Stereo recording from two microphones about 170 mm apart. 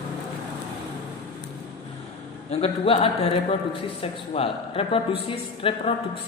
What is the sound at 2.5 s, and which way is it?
Speech, 35° left (ahead or behind).